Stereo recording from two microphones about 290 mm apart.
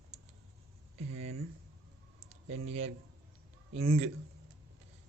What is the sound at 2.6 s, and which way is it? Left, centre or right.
A man's voice, right.